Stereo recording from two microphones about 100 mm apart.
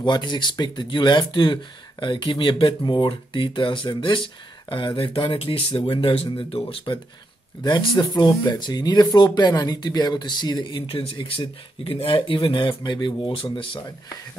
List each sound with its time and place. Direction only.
0.0 s speech: 50° left (ahead or behind)